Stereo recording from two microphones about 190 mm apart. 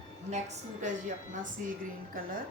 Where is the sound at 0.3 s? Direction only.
40° right (ahead or behind).